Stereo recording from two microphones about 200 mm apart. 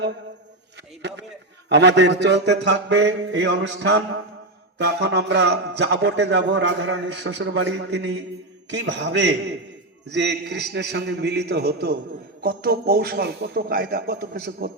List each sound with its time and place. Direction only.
1.7 s a man's voice: 60° right (ahead or behind)